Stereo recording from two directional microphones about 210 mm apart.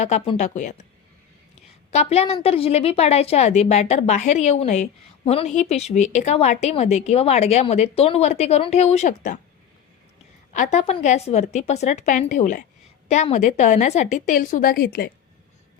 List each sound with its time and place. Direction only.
0.0 s a woman's voice: 30° left (ahead or behind)
1.9 s a woman's voice: 30° left (ahead or behind)
10.5 s a woman's voice: 35° left (ahead or behind)